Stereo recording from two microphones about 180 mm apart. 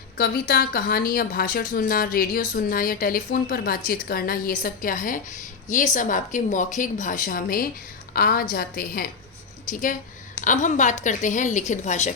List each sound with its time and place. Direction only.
0.2 s speech: 55° left (ahead or behind); by 12.1 s 40° left (ahead or behind)